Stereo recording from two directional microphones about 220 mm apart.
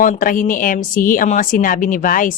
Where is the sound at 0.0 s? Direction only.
40° left (ahead or behind).